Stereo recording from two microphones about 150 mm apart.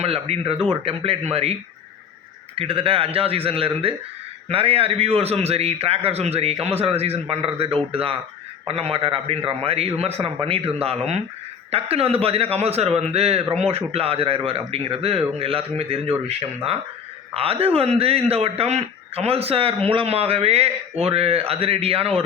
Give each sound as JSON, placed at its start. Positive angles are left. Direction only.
{"t": 0.0, "sound": "speech", "side_deg": -40}
{"t": 2.6, "sound": "speech", "side_deg": -40}